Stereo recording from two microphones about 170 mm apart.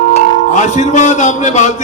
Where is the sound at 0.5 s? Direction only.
45° left (ahead or behind).